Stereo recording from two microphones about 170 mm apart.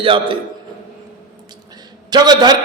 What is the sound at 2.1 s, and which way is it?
Speech, 25° right (ahead or behind).